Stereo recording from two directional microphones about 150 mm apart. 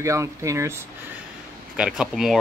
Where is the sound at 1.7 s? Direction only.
5° right (ahead or behind).